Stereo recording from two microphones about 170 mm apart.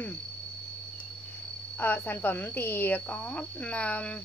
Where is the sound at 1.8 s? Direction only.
10° left (ahead or behind).